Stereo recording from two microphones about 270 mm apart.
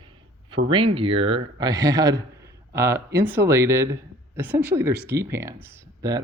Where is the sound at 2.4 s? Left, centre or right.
Centre.